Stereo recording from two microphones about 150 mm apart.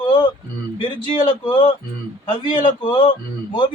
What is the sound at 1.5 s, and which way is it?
Speech, 30° left (ahead or behind).